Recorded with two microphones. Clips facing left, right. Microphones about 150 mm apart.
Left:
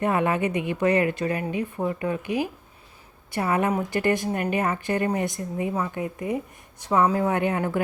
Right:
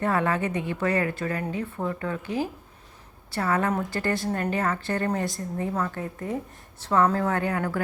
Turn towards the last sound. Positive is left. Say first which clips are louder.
# left 2 dB
turn(degrees=20)  # may be behind; listen again after turning